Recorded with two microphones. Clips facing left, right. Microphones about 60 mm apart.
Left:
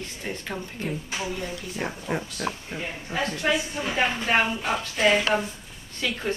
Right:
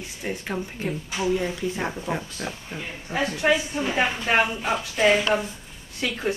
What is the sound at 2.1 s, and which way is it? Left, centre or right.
A woman's voice, centre.